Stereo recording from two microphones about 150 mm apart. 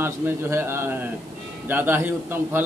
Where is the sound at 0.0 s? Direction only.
15° right (ahead or behind).